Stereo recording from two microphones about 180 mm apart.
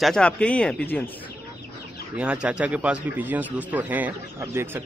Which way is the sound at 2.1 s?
5° right (ahead or behind).